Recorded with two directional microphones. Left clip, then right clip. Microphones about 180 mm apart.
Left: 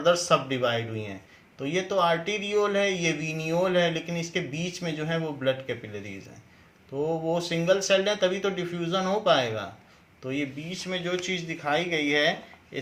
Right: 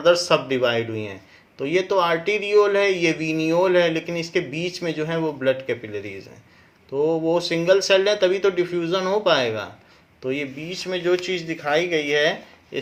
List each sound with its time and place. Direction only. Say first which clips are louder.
0.0 s speech: right 5 dB; 40° right (ahead or behind)
7.0 s speech: right 7 dB; 35° right (ahead or behind)